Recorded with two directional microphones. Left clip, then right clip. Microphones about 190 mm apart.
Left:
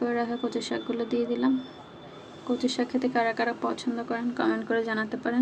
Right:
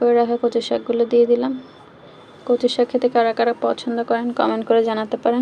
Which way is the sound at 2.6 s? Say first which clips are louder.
Right 10 dB; 15° right (ahead or behind).